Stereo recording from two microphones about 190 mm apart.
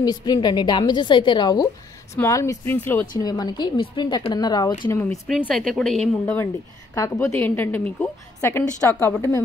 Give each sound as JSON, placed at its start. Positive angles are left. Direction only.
{"t": 0.0, "sound": "a woman's voice", "side_deg": 20}
{"t": 5.5, "sound": "a woman's voice", "side_deg": 0}
{"t": 7.0, "sound": "a woman's voice", "side_deg": 15}